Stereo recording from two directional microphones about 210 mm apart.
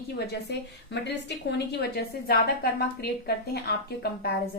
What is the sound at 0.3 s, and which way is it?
A woman's voice, 55° left (ahead or behind).